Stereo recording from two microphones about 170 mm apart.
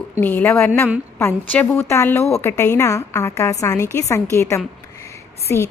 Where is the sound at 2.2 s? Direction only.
Centre (ahead or behind).